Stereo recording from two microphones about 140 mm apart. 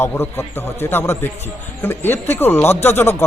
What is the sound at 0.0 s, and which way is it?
Speech, 15° left (ahead or behind).